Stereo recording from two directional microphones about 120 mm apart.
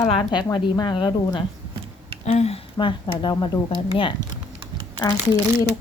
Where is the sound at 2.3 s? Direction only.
60° left (ahead or behind).